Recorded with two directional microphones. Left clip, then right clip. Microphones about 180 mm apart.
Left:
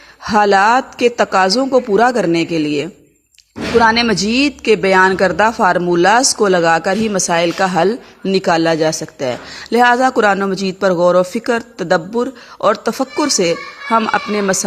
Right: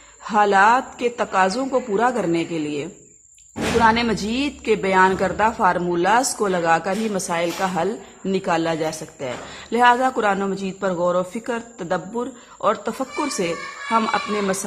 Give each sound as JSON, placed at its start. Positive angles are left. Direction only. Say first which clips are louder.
{"t": 0.3, "sound": "a man's voice", "louder": "left 4 dB", "side_deg": 35}